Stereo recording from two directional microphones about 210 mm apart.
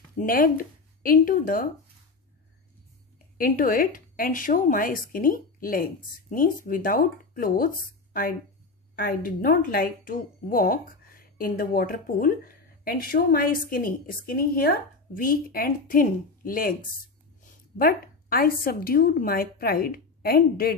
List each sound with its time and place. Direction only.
0.2 s speech: 40° left (ahead or behind)
3.3 s a woman's voice: 40° left (ahead or behind)